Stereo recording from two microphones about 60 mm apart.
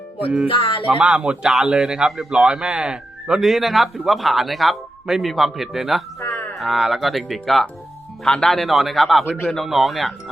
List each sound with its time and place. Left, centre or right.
0.9 s speech: right; by 6.0 s centre
6.2 s a sound: left
6.6 s speech: centre